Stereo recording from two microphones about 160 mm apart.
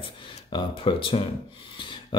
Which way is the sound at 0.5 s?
30° left (ahead or behind).